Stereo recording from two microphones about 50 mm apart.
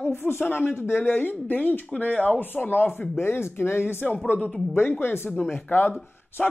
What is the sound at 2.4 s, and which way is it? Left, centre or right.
Speech, left.